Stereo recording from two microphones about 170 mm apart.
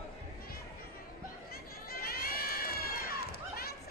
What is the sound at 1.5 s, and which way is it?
Crowd, 60° left (ahead or behind).